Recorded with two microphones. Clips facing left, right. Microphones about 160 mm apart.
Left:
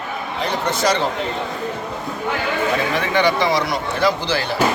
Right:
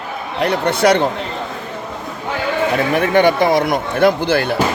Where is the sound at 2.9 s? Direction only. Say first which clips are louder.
Right 5 dB; 50° right (ahead or behind).